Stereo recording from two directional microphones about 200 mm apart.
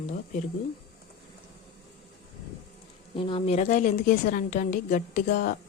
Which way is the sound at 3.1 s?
25° left (ahead or behind).